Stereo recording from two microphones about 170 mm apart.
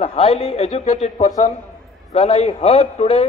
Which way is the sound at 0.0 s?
35° left (ahead or behind).